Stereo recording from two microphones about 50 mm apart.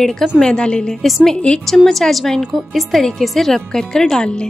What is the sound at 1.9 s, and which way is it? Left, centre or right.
Speech, centre.